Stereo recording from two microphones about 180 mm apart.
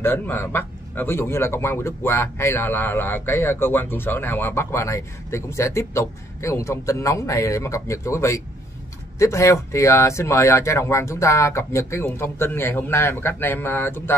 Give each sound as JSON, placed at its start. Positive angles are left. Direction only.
{"t": 0.0, "sound": "a man's voice", "side_deg": 10}